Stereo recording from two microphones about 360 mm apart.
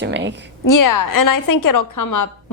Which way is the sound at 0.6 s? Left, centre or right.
Left.